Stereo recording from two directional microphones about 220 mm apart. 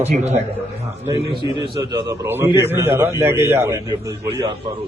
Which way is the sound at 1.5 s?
20° right (ahead or behind).